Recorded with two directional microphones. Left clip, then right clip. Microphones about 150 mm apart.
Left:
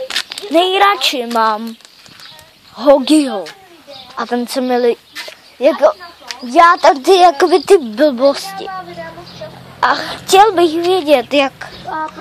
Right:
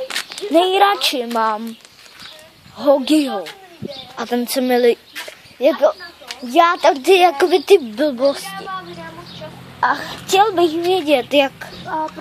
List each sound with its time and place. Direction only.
0.1 s a sound: 50° left (ahead or behind)
0.5 s a woman's voice: 5° right (ahead or behind)
1.3 s a woman's voice: 25° left (ahead or behind)
3.1 s speech: 15° left (ahead or behind)
4.2 s a woman's voice: 5° right (ahead or behind)
4.6 s speech: 15° right (ahead or behind)
5.6 s a woman's voice: 5° left (ahead or behind); by 8.6 s 30° left (ahead or behind)
9.8 s a woman's voice: 20° left (ahead or behind)
10.9 s speech: 10° left (ahead or behind)